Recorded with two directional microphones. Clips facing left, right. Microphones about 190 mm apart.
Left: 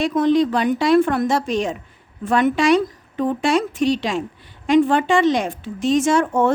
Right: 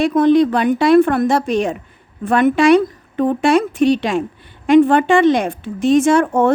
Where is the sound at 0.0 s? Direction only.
60° right (ahead or behind).